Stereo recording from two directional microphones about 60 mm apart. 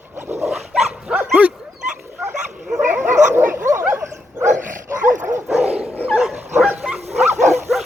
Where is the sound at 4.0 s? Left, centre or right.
Right.